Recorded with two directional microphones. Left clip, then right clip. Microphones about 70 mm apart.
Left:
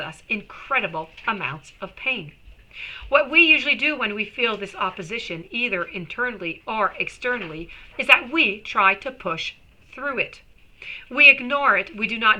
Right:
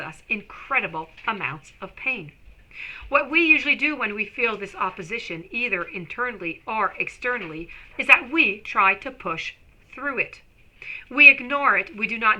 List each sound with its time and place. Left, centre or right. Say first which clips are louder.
0.0 s a woman's voice: left 1 dB; right